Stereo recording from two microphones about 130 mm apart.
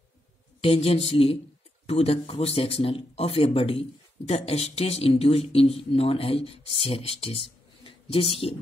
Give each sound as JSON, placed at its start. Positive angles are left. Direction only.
{"t": 0.6, "sound": "speech", "side_deg": 50}